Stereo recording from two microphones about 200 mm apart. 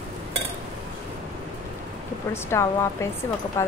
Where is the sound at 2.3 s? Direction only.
15° left (ahead or behind).